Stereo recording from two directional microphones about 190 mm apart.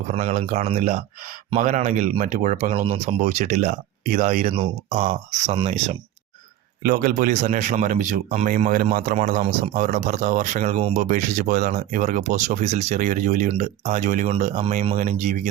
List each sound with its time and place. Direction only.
0.1 s speech: 35° right (ahead or behind)
6.8 s speech: 50° right (ahead or behind)